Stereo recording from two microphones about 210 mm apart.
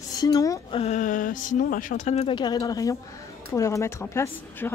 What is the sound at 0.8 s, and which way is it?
A woman's voice, 35° left (ahead or behind).